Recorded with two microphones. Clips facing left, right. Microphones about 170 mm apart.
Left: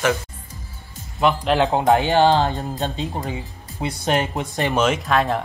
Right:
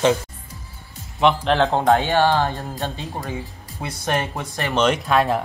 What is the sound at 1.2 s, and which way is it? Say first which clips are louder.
Speech: right 1 dB; 5° left (ahead or behind).